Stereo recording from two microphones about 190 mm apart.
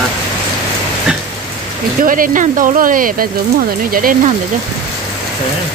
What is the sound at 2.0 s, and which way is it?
Speech, 45° right (ahead or behind).